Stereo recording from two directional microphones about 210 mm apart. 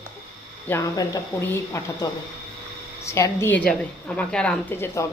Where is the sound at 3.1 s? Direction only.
15° left (ahead or behind).